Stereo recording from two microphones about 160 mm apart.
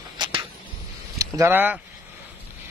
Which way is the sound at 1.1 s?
20° right (ahead or behind).